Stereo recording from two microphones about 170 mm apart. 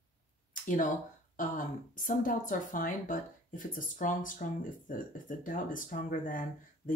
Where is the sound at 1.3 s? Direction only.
55° left (ahead or behind).